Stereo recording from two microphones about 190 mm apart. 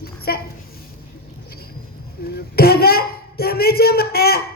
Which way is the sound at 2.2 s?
55° left (ahead or behind).